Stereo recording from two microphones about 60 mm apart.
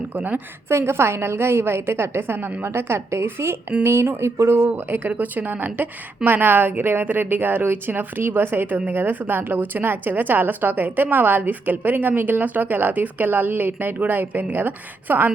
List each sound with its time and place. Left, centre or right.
0.1 s a woman's voice: right
0.7 s a woman's voice: right
4.7 s speech: right